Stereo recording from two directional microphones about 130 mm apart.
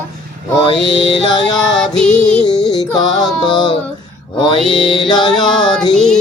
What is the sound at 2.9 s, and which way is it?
Music, 30° left (ahead or behind).